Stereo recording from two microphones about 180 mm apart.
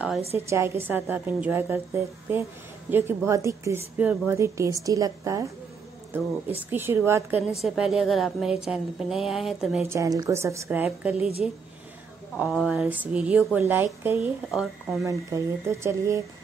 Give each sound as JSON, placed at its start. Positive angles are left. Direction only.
{"t": 0.5, "sound": "a woman's voice", "side_deg": -15}
{"t": 2.9, "sound": "a woman's voice", "side_deg": -15}
{"t": 9.8, "sound": "a woman's voice", "side_deg": -20}
{"t": 12.4, "sound": "a woman's voice", "side_deg": -5}
{"t": 15.0, "sound": "a woman's voice", "side_deg": -15}